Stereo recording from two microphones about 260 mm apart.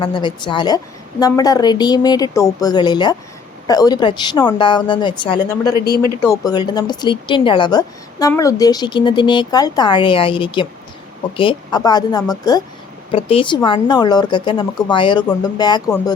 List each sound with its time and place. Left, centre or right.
0.0 s speech: centre